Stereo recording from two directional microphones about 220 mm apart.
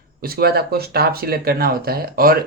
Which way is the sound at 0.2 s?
45° right (ahead or behind).